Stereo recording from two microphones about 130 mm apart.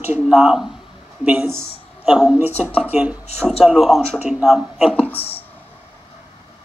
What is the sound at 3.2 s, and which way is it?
Speech, 50° left (ahead or behind).